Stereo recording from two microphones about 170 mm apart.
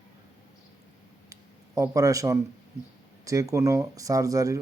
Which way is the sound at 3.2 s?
20° right (ahead or behind).